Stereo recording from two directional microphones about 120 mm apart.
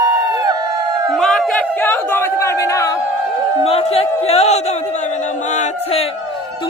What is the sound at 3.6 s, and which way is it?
Speech, 60° left (ahead or behind).